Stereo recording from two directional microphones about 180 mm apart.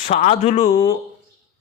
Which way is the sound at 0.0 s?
40° left (ahead or behind).